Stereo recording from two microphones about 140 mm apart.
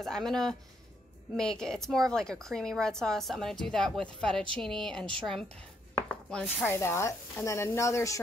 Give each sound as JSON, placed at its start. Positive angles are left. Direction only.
{"t": 0.0, "sound": "a woman's voice", "side_deg": 5}
{"t": 6.3, "sound": "speech", "side_deg": 15}